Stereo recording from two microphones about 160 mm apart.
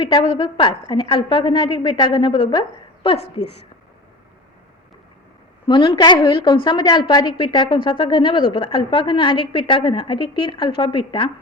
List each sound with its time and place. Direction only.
0.0 s a woman's voice: 30° left (ahead or behind)
5.6 s a woman's voice: 30° left (ahead or behind)